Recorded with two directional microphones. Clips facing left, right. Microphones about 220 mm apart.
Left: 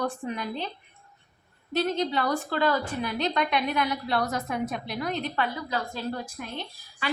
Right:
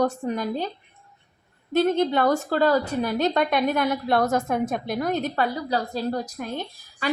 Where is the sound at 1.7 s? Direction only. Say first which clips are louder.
Right 6 dB; 50° right (ahead or behind).